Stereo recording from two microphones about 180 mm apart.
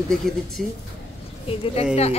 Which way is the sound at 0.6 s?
50° right (ahead or behind).